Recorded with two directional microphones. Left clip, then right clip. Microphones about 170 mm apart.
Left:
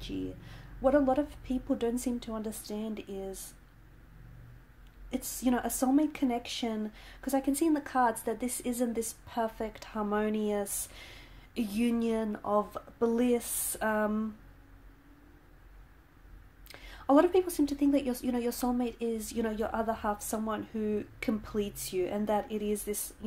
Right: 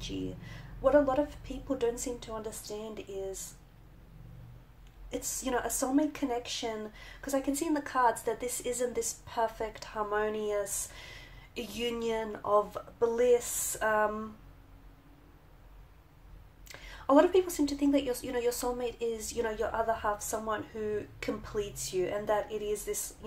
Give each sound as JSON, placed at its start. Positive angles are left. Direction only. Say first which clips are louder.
{"t": 0.0, "sound": "speech", "louder": "even", "side_deg": 35}
{"t": 5.1, "sound": "speech", "louder": "left 1 dB", "side_deg": 40}
{"t": 16.6, "sound": "speech", "louder": "even", "side_deg": 35}